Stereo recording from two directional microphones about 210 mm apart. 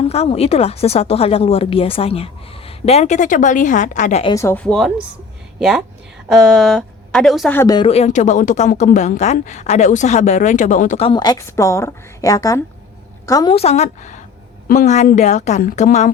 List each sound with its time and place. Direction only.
0.0 s speech: 30° left (ahead or behind)
4.4 s speech: 10° left (ahead or behind)
7.9 s speech: 30° left (ahead or behind)